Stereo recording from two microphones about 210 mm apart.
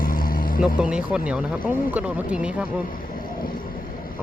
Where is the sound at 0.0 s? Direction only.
40° left (ahead or behind).